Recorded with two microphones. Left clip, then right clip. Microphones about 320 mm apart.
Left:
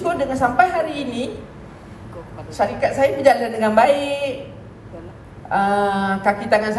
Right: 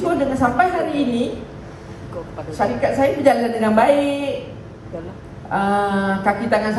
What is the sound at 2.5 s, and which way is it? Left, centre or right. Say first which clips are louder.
A woman's voice: even; left.